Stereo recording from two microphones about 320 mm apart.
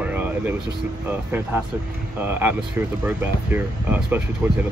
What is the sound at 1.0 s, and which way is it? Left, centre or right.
Speech, centre.